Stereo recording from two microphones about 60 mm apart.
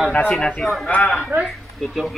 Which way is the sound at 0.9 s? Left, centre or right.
Left.